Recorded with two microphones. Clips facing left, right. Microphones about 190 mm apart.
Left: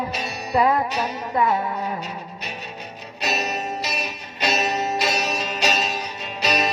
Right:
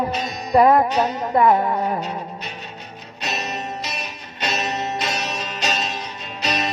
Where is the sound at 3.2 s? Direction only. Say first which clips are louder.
Left 2 dB; 10° left (ahead or behind).